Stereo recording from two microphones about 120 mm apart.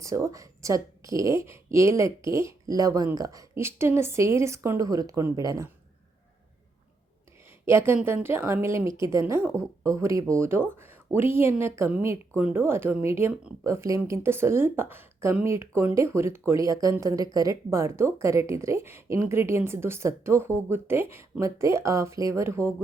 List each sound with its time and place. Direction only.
0.0 s speech: 25° right (ahead or behind)
7.6 s speech: 20° right (ahead or behind)